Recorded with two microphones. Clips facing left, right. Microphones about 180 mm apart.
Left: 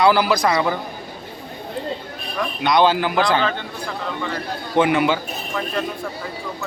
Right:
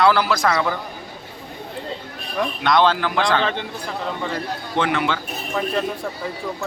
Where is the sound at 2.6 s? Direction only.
5° left (ahead or behind).